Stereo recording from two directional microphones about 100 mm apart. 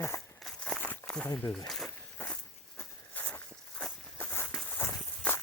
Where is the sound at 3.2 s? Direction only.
15° left (ahead or behind).